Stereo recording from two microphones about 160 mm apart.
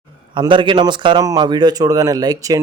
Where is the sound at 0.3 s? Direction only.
30° right (ahead or behind).